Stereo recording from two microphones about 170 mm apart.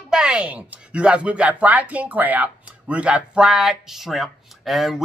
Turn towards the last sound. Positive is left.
turn(degrees=0)  # may be behind; listen again after turning